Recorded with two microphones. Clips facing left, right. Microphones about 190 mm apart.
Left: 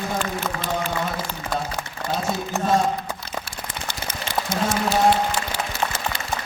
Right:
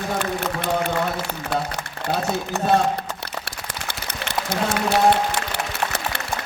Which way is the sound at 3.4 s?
65° right (ahead or behind).